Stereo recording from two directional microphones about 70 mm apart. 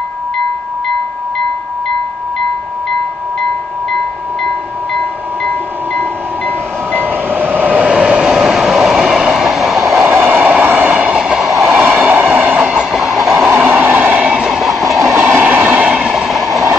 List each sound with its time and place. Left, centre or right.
4.9 s chime: centre
7.0 s train: right
7.9 s vehicle: centre
8.4 s train: centre
10.0 s train: right
11.6 s vehicle: right
12.5 s train: centre
13.5 s train: right
14.2 s train: centre
14.9 s train: right
15.1 s train: right
15.9 s train: centre